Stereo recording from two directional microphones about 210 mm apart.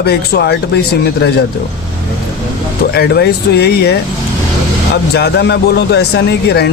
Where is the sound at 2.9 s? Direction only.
50° left (ahead or behind).